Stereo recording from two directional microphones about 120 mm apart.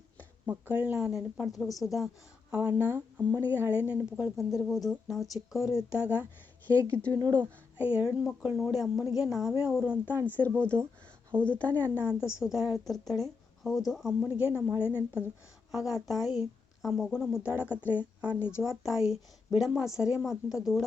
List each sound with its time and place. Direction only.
0.4 s speech: 15° right (ahead or behind)
1.5 s speech: 30° left (ahead or behind)
2.5 s a woman's voice: 15° right (ahead or behind)
6.7 s speech: 20° right (ahead or behind)
7.1 s speech: 35° right (ahead or behind)
7.8 s a woman's voice: 15° right (ahead or behind)
10.7 s speech: 35° right (ahead or behind)
11.4 s speech: 10° left (ahead or behind)
12.0 s a woman's voice: 5° right (ahead or behind)
14.3 s speech: 15° right (ahead or behind)
15.7 s a woman's voice: centre (ahead or behind)